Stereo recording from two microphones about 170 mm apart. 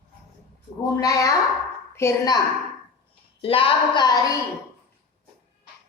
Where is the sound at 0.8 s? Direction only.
20° left (ahead or behind).